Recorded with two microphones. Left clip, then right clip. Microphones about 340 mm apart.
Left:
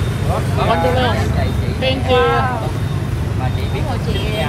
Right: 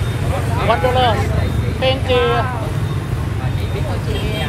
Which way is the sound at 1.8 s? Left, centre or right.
Centre.